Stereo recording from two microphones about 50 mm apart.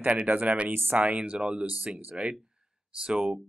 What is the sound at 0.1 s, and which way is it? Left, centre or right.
Speech, right.